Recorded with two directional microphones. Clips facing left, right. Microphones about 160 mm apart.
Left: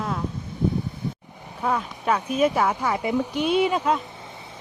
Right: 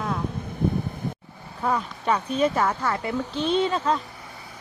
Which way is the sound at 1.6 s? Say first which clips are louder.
Even; 5° left (ahead or behind).